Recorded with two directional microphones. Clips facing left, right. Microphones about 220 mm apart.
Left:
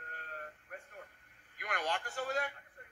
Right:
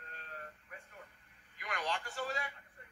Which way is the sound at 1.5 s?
50° left (ahead or behind).